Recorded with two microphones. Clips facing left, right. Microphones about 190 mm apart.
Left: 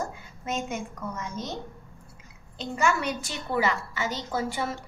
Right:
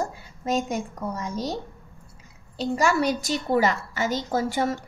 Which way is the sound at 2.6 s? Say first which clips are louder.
Right 4 dB; 35° right (ahead or behind).